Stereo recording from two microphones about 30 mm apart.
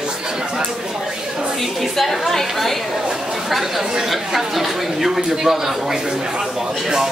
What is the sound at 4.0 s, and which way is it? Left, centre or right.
Speech, centre.